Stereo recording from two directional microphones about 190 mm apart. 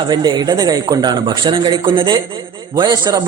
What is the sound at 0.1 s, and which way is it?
Speech, 20° right (ahead or behind).